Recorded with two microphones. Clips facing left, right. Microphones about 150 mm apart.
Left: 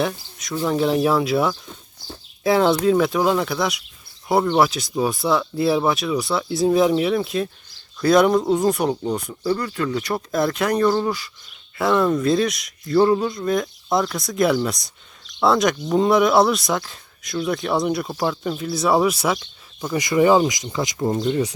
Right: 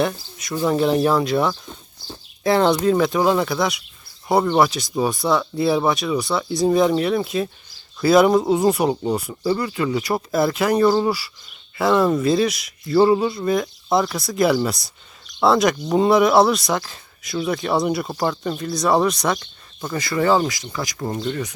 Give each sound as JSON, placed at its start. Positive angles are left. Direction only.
{"t": 0.0, "sound": "speech", "side_deg": 0}